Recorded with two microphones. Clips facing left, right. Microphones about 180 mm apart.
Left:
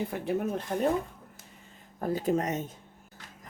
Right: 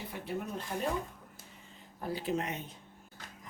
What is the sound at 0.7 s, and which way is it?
Speech, 50° left (ahead or behind).